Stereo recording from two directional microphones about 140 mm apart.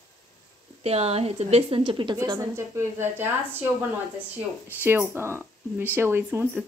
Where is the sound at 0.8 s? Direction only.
45° right (ahead or behind).